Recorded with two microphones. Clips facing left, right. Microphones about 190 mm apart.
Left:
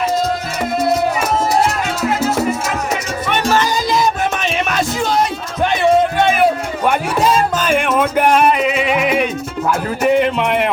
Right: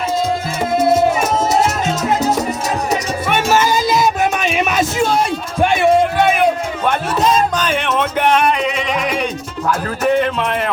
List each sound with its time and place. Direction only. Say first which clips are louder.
0.8 s music: right 3 dB; 25° right (ahead or behind)
3.2 s music: right 1 dB; 10° right (ahead or behind)
6.2 s music: even; 5° left (ahead or behind)
10.0 s speech: left 2 dB; 15° left (ahead or behind)